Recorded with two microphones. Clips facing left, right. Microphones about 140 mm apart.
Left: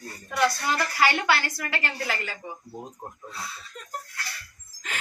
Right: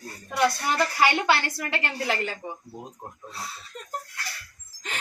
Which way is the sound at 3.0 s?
5° left (ahead or behind).